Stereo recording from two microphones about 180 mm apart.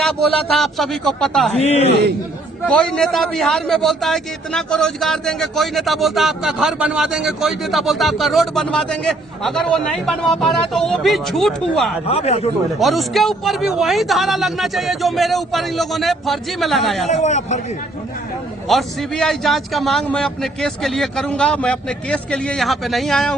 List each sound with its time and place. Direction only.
0.0 s a man's voice: centre (ahead or behind)
1.5 s speech: 35° left (ahead or behind)
2.6 s a man's voice: 5° left (ahead or behind)
12.0 s speech: 35° left (ahead or behind)
12.8 s a man's voice: centre (ahead or behind)
17.1 s speech: 40° left (ahead or behind)
18.7 s a man's voice: centre (ahead or behind)